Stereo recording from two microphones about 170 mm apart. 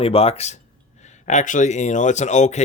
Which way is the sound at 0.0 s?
35° left (ahead or behind).